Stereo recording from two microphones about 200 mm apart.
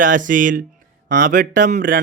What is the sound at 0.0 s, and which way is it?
Speech, 40° right (ahead or behind).